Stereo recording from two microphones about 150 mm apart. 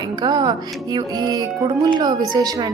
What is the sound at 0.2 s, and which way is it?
A woman's voice, 30° right (ahead or behind).